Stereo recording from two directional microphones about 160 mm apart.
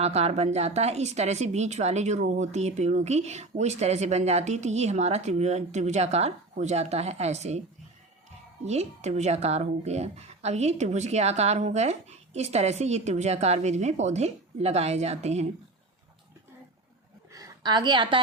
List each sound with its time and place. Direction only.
0.0 s a woman's voice: 40° right (ahead or behind)
8.6 s a woman's voice: 45° right (ahead or behind)
17.3 s a sound: 25° right (ahead or behind)